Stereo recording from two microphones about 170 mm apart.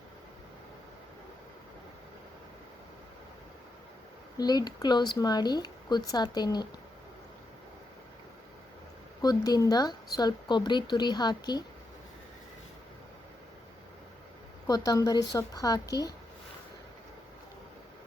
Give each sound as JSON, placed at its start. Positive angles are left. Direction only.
{"t": 4.4, "sound": "speech", "side_deg": 25}
{"t": 9.2, "sound": "speech", "side_deg": 20}
{"t": 14.7, "sound": "speech", "side_deg": 20}